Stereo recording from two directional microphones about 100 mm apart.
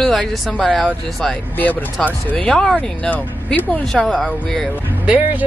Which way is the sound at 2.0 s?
10° left (ahead or behind).